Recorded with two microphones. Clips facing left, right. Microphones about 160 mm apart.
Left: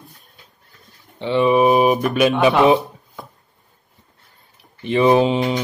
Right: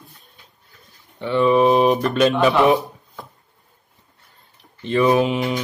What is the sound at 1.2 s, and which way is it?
Speech, 20° left (ahead or behind).